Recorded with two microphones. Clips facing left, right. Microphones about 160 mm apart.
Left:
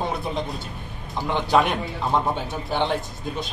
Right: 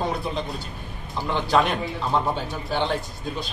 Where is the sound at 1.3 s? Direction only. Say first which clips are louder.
Left 1 dB; 20° left (ahead or behind).